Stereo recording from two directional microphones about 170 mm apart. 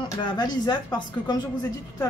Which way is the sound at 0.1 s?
25° left (ahead or behind).